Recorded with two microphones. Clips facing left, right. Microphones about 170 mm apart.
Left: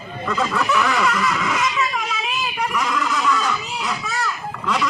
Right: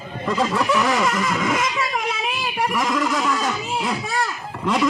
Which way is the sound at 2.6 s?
45° right (ahead or behind).